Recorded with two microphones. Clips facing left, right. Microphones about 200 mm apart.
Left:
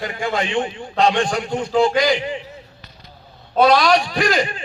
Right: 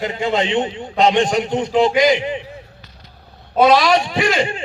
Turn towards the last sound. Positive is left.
turn(degrees=-25)  # may be behind; listen again after turning